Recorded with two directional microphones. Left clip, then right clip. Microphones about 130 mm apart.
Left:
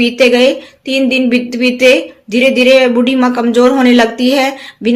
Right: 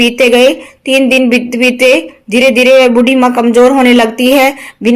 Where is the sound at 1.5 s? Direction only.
45° right (ahead or behind).